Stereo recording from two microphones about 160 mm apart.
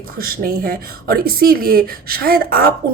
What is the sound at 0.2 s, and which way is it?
Speech, 65° right (ahead or behind).